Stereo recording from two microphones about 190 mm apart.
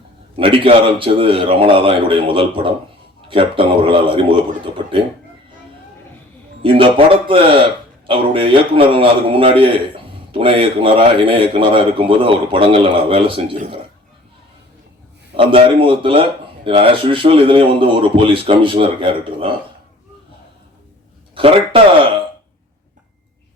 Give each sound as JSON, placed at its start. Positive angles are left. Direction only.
{"t": 0.3, "sound": "a man's voice", "side_deg": -30}
{"t": 6.6, "sound": "a man's voice", "side_deg": -30}
{"t": 15.4, "sound": "a man's voice", "side_deg": -30}
{"t": 21.3, "sound": "a man's voice", "side_deg": -30}